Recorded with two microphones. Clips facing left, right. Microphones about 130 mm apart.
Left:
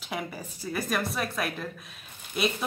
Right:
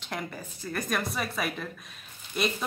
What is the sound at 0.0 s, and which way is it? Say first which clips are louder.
A woman's voice: left 1 dB; 5° left (ahead or behind).